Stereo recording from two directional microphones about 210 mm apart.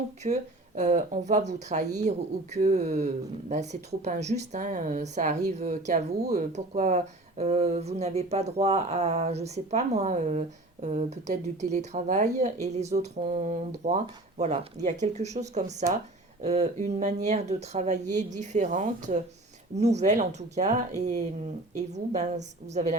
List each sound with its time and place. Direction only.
0.2 s speech: 35° right (ahead or behind)